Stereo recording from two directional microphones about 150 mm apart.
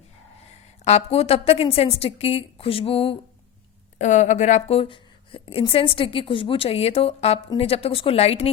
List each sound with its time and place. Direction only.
0.9 s a woman's voice: 45° left (ahead or behind)
3.9 s a woman's voice: 55° left (ahead or behind)
4.8 s a woman's voice: 35° left (ahead or behind)